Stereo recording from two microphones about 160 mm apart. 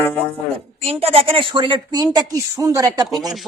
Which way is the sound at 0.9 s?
35° right (ahead or behind).